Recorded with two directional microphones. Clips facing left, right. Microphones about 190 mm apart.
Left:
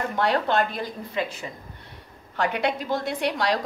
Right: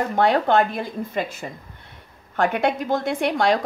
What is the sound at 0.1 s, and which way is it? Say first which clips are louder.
A woman's voice: right 5 dB; 55° right (ahead or behind).